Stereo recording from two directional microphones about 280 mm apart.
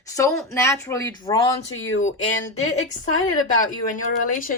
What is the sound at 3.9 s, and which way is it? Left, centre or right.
Speech, left.